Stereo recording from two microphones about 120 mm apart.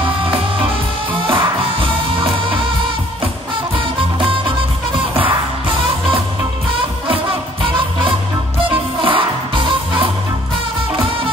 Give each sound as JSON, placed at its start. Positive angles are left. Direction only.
{"t": 1.2, "sound": "music", "side_deg": -45}
{"t": 8.5, "sound": "music", "side_deg": -45}